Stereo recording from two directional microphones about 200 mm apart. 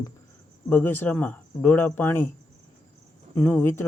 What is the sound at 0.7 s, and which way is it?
Speech, 10° left (ahead or behind).